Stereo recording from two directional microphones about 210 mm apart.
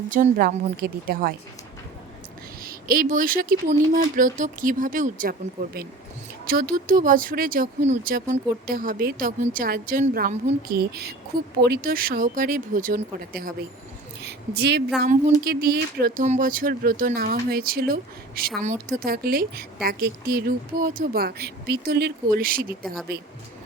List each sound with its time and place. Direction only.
0.1 s speech: 40° right (ahead or behind)
2.6 s speech: 45° right (ahead or behind)
14.2 s a sound: 50° right (ahead or behind)
15.4 s speech: 45° right (ahead or behind)